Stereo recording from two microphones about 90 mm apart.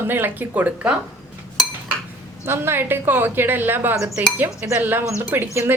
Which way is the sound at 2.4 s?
25° right (ahead or behind).